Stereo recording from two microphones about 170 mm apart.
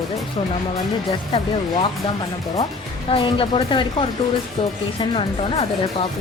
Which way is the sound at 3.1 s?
30° left (ahead or behind).